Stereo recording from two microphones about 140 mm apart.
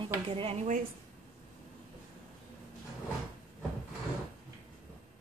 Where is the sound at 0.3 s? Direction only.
45° right (ahead or behind).